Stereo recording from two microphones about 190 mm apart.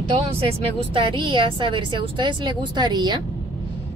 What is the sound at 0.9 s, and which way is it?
Speech, 25° right (ahead or behind).